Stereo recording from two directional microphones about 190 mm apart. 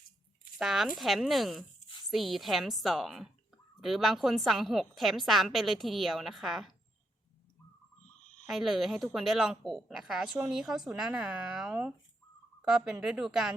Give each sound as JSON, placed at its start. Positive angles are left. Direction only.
{"t": 0.6, "sound": "speech", "side_deg": 0}
{"t": 8.2, "sound": "a sound", "side_deg": 35}
{"t": 8.4, "sound": "speech", "side_deg": 0}